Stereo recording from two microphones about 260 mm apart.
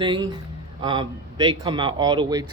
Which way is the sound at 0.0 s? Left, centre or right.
Centre.